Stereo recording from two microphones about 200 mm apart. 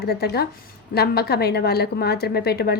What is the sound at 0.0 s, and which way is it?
A woman's voice, 50° left (ahead or behind).